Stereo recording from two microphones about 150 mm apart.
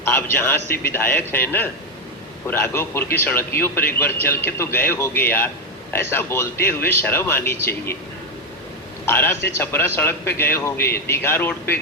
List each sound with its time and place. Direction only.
0.0 s speech: 15° left (ahead or behind)
9.0 s speech: 15° left (ahead or behind)
10.8 s speech: 90° left
11.1 s speech: 15° left (ahead or behind)